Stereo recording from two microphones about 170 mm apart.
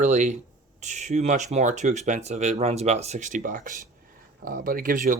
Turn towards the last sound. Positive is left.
turn(degrees=-50)  # may be behind; listen again after turning